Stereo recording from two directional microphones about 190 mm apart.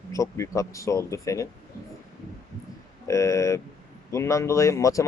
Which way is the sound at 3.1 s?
15° left (ahead or behind).